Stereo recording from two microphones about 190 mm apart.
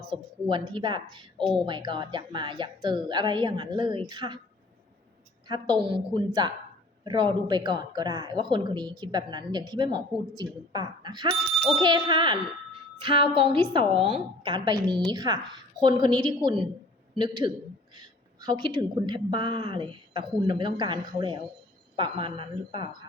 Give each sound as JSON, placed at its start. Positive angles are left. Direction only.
{"t": 0.1, "sound": "speech", "side_deg": -25}
{"t": 5.5, "sound": "speech", "side_deg": -25}